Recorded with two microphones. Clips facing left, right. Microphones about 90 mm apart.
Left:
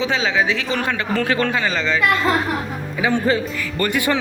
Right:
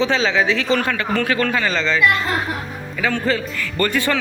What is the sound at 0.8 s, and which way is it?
Speech, 20° left (ahead or behind).